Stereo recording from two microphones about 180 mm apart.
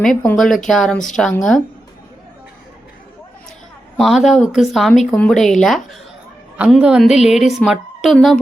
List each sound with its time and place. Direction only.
0.3 s speech: 5° left (ahead or behind)
3.9 s speech: centre (ahead or behind)